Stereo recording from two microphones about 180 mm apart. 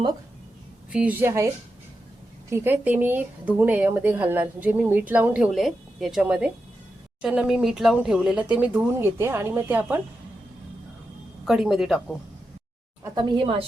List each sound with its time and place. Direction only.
0.9 s speech: 10° right (ahead or behind)
2.5 s speech: 10° right (ahead or behind)
11.4 s speech: centre (ahead or behind)
13.1 s a woman's voice: 30° right (ahead or behind)